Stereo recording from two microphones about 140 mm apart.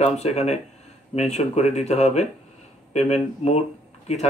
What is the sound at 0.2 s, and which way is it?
Speech, 50° left (ahead or behind).